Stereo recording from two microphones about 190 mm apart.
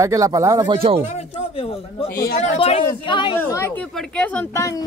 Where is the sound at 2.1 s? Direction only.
50° left (ahead or behind).